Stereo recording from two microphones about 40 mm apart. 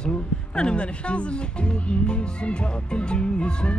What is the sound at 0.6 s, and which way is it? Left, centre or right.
Music, left.